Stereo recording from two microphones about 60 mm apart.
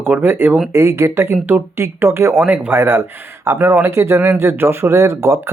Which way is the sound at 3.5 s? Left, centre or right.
Right.